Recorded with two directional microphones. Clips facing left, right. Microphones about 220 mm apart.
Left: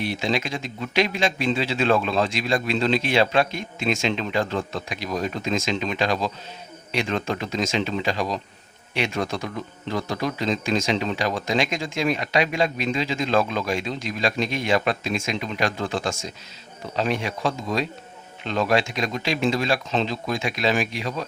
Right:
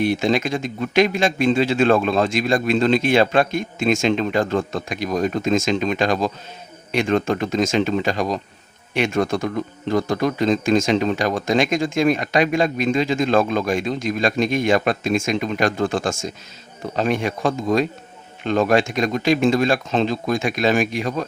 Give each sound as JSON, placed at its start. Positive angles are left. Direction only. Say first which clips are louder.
{"t": 0.0, "sound": "speech", "louder": "right 6 dB", "side_deg": -50}